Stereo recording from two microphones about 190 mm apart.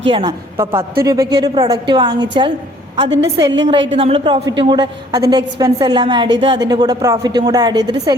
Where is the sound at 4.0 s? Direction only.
30° right (ahead or behind).